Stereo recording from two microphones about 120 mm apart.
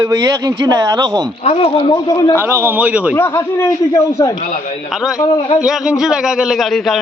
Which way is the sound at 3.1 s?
20° left (ahead or behind).